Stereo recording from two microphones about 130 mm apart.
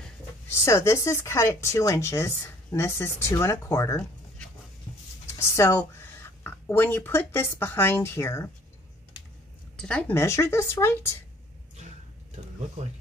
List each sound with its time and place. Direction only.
0.5 s speech: 20° left (ahead or behind)
5.3 s speech: 20° left (ahead or behind)
9.8 s speech: 5° left (ahead or behind)
10.1 s speech: 20° left (ahead or behind)
12.8 s speech: 65° right (ahead or behind)